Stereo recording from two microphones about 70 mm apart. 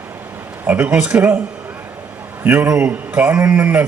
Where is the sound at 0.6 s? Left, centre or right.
Right.